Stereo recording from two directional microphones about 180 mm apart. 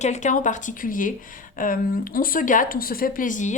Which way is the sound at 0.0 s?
40° left (ahead or behind).